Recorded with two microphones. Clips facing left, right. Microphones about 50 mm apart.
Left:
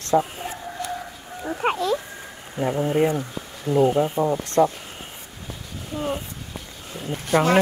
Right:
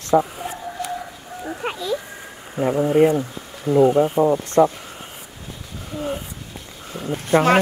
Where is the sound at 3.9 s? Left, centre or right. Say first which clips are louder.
Right 4 dB; centre.